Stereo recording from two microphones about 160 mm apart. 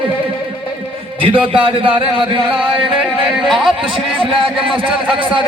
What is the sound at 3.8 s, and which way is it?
A man's voice, 35° right (ahead or behind).